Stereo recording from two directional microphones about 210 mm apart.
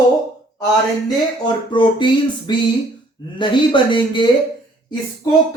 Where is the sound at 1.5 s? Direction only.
20° left (ahead or behind).